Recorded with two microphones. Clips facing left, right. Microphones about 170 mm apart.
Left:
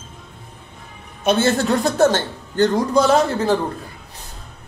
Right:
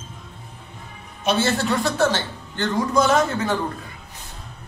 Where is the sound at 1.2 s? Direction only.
50° left (ahead or behind); by 3.6 s 30° left (ahead or behind).